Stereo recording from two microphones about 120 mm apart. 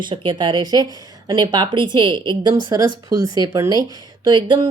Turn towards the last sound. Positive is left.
turn(degrees=-40)  # may be behind; listen again after turning